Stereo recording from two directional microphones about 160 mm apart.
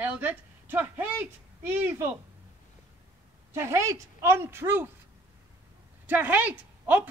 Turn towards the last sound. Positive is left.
turn(degrees=-10)  # may be behind; listen again after turning